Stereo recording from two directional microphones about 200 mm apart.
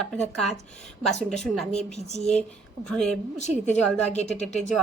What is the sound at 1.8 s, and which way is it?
Speech, 35° left (ahead or behind).